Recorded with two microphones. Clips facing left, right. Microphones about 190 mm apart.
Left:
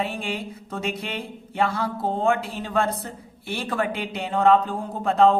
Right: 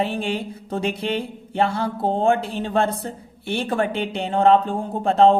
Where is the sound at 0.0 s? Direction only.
30° right (ahead or behind).